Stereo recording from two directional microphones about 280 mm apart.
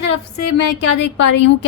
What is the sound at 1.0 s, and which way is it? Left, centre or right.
Speech, left.